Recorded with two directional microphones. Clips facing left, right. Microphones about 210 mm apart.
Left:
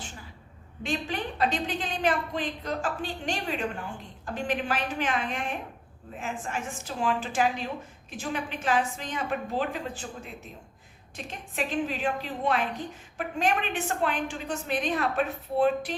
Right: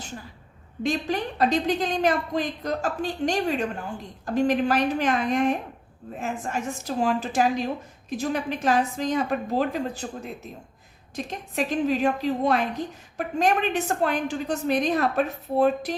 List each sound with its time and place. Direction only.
0.8 s a woman's voice: 40° right (ahead or behind)